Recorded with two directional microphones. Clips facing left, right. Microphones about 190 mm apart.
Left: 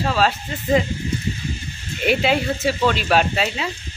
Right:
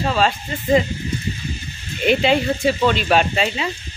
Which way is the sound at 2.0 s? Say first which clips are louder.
Right 2 dB; 5° left (ahead or behind).